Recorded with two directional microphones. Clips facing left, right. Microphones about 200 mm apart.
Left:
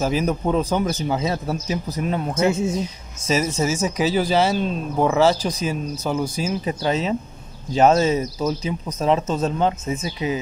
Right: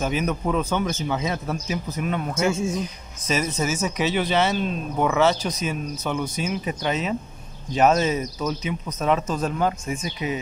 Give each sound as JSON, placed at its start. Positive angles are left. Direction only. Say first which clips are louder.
{"t": 0.0, "sound": "speech", "louder": "left 3 dB", "side_deg": 30}
{"t": 2.3, "sound": "speech", "louder": "left 4 dB", "side_deg": 20}